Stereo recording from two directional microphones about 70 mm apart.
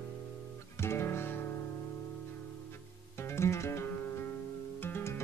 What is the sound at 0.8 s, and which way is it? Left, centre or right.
Music, left.